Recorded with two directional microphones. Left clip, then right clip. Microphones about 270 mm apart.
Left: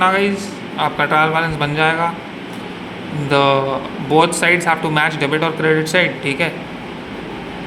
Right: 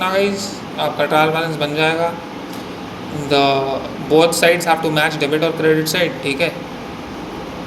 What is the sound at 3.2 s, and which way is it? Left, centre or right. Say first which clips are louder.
A man's voice: left 1 dB; centre.